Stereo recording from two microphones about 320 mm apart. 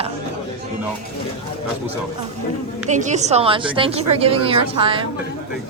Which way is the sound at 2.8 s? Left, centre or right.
Right.